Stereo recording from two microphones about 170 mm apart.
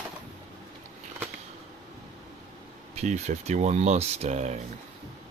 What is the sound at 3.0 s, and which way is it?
Speech, 40° right (ahead or behind).